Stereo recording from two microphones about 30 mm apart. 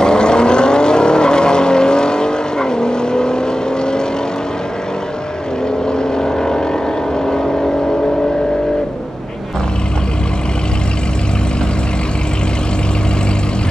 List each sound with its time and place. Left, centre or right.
0.0 s vehicle: left
6.1 s vehicle: left